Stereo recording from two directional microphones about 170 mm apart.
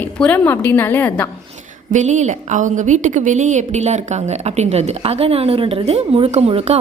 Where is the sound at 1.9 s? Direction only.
45° right (ahead or behind).